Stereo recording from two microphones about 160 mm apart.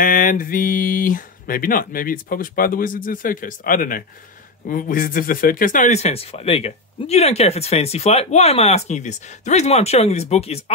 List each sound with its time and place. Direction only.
0.0 s speech: 55° left (ahead or behind); by 10.6 s 40° left (ahead or behind)